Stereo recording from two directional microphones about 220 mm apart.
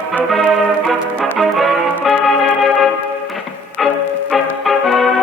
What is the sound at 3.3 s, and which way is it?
Music, centre (ahead or behind).